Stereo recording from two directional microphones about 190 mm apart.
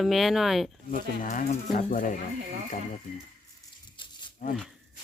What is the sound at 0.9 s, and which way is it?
Speech, 45° left (ahead or behind).